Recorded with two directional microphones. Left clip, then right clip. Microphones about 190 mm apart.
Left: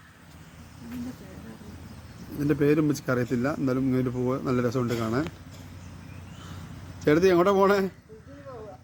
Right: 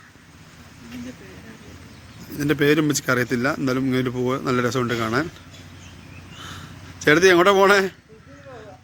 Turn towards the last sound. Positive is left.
turn(degrees=0)  # may be behind; listen again after turning